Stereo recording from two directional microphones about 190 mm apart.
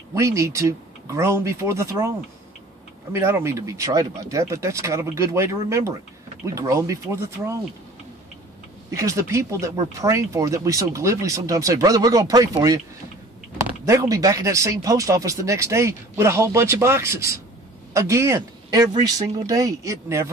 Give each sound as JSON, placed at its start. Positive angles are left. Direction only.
{"t": 0.1, "sound": "speech", "side_deg": -15}
{"t": 8.9, "sound": "speech", "side_deg": -15}
{"t": 13.8, "sound": "speech", "side_deg": -15}